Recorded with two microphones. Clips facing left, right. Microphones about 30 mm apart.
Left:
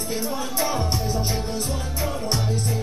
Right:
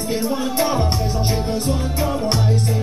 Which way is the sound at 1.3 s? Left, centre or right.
Right.